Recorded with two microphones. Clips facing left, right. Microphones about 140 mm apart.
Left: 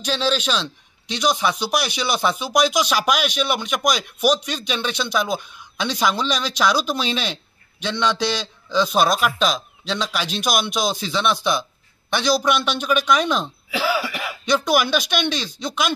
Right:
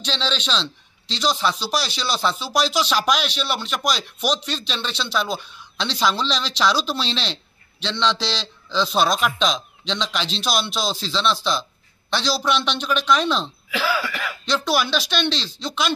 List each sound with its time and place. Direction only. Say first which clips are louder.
0.0 s a man's voice: left 5 dB; 10° left (ahead or behind)